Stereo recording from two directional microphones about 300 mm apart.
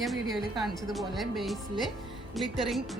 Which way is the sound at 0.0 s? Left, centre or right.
Centre.